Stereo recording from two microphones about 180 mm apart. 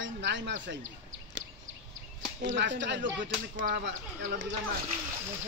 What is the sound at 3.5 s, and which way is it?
Speech, 50° right (ahead or behind).